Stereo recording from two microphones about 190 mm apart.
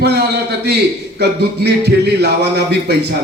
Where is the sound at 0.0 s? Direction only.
60° right (ahead or behind).